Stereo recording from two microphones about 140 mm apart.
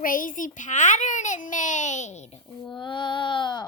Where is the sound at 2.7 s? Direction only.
35° left (ahead or behind).